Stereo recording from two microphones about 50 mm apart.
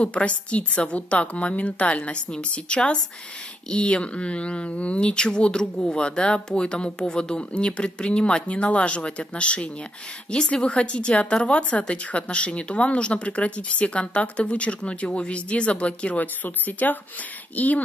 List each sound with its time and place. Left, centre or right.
0.0 s speech: left